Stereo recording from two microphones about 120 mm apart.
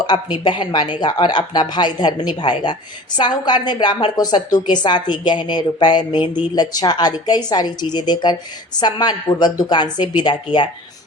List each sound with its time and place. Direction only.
0.0 s a woman's voice: 35° left (ahead or behind)